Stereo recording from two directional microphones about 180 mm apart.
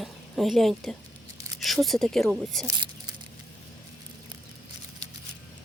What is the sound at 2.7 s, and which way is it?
Speech, 25° right (ahead or behind).